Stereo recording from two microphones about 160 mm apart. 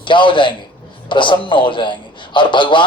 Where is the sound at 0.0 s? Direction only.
30° left (ahead or behind).